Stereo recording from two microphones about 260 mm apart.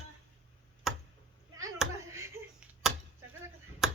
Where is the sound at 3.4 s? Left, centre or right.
Centre.